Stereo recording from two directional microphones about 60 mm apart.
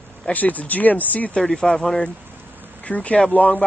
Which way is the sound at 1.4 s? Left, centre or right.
Centre.